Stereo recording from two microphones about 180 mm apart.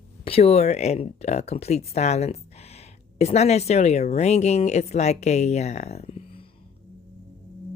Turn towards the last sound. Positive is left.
turn(degrees=35)  # may be behind; listen again after turning